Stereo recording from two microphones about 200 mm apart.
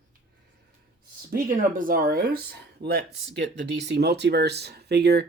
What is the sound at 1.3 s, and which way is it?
Speech, 45° right (ahead or behind).